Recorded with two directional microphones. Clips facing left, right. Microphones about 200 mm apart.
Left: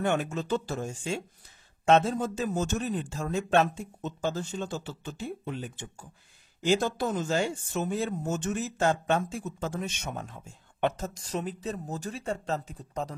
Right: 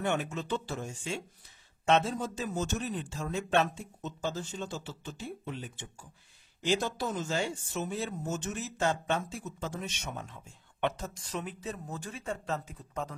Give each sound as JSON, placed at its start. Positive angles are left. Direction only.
{"t": 0.0, "sound": "a man's voice", "side_deg": 45}